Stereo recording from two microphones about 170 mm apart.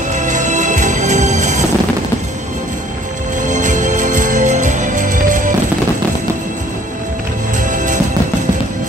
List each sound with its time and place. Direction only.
0.1 s music: 45° right (ahead or behind)
3.4 s music: 50° right (ahead or behind)
7.7 s music: 45° right (ahead or behind)